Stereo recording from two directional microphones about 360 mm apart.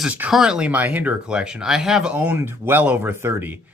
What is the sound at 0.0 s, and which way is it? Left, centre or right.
Speech, centre.